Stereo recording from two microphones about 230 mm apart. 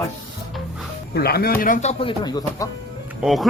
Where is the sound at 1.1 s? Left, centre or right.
Left; by 2.6 s centre.